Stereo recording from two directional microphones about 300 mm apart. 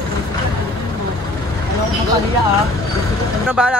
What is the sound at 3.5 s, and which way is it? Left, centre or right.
Speech, centre.